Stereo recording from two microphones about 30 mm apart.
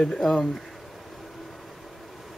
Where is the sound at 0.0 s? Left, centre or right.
Centre.